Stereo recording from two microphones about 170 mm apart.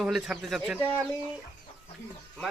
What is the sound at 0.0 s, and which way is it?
Speech, 5° right (ahead or behind).